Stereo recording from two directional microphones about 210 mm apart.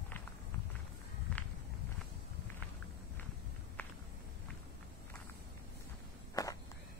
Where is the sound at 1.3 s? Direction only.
5° left (ahead or behind).